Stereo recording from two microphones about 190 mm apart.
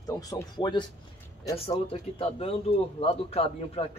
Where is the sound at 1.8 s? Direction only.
30° left (ahead or behind).